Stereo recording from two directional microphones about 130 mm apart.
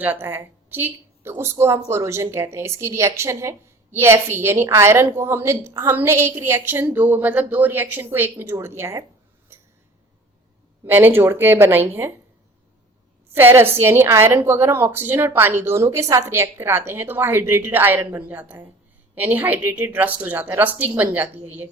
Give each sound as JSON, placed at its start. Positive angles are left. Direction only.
{"t": 0.0, "sound": "a woman's voice", "side_deg": -15}
{"t": 9.5, "sound": "a sound", "side_deg": -20}
{"t": 10.8, "sound": "a woman's voice", "side_deg": -15}
{"t": 13.3, "sound": "a woman's voice", "side_deg": -15}